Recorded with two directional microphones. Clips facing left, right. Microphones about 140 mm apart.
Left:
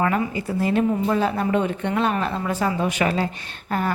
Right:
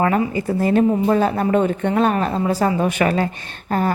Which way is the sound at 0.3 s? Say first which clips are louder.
Right 5 dB; 45° right (ahead or behind).